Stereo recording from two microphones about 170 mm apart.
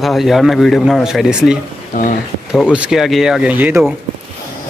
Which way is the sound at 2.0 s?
50° left (ahead or behind).